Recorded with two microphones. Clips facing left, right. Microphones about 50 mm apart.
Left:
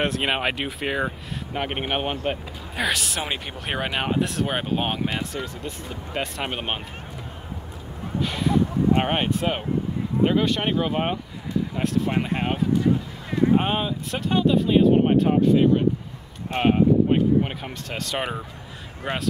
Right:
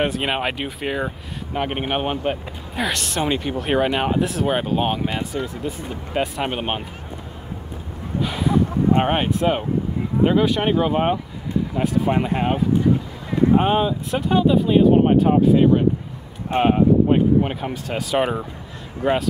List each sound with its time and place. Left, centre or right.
0.0 s speech: centre
8.2 s a sound: centre
9.0 s speech: centre